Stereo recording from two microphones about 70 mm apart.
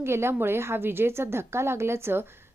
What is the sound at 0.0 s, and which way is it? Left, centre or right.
A woman's voice, right.